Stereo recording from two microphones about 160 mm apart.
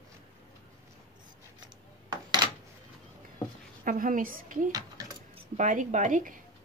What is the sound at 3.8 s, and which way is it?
Speech, 60° right (ahead or behind).